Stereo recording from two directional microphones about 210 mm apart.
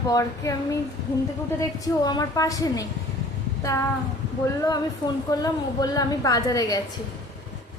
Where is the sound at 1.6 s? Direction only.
20° left (ahead or behind).